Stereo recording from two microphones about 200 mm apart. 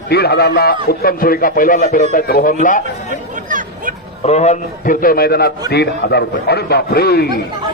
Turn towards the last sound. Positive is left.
turn(degrees=50)  # may be behind; listen again after turning